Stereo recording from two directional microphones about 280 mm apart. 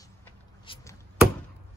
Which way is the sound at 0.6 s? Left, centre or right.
Centre.